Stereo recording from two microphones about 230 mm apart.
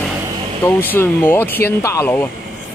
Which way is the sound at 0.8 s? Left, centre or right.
Centre.